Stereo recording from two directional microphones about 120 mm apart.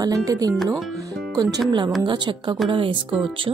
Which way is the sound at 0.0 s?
30° right (ahead or behind).